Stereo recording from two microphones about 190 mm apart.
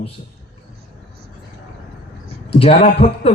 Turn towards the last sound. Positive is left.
turn(degrees=35)  # may be behind; listen again after turning